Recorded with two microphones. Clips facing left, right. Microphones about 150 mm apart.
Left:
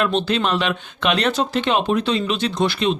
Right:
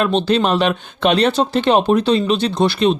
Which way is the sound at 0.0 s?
35° right (ahead or behind).